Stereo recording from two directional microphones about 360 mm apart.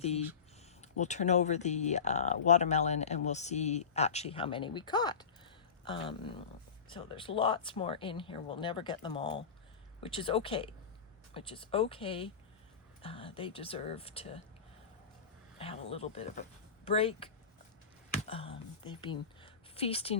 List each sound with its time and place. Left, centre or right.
0.8 s speech: centre
15.5 s speech: centre
18.3 s speech: centre